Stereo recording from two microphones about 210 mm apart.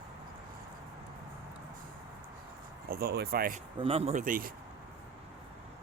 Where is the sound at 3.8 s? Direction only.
25° right (ahead or behind).